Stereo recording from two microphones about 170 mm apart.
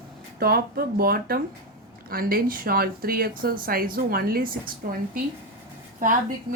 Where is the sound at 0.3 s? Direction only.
65° right (ahead or behind).